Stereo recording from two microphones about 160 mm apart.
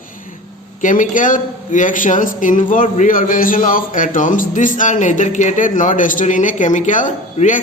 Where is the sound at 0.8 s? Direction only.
55° left (ahead or behind).